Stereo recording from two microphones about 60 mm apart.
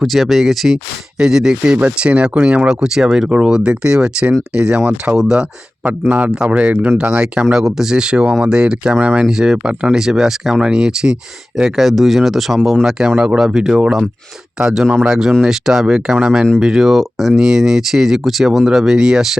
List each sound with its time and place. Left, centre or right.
0.0 s speech: centre
1.7 s speech: right
5.1 s speech: right
7.5 s speech: centre